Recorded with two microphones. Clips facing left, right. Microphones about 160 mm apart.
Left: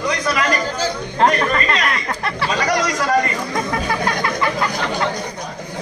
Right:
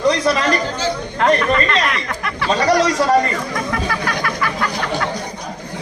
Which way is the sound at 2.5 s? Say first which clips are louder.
Right 6 dB; 30° right (ahead or behind).